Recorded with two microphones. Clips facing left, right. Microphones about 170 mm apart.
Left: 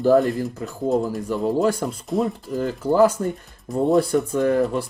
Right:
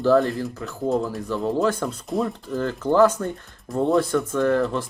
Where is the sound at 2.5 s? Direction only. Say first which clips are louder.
Even; 10° left (ahead or behind).